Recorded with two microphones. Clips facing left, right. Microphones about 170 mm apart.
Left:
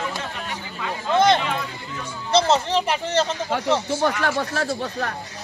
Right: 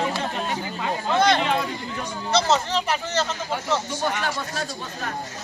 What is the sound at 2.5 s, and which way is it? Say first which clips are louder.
Speech: left 2 dB; 30° left (ahead or behind).